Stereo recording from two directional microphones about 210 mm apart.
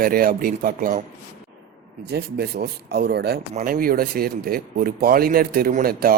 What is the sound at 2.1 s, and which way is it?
Speech, 50° right (ahead or behind).